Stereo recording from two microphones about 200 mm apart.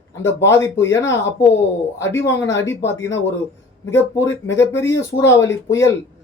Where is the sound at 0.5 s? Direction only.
15° left (ahead or behind).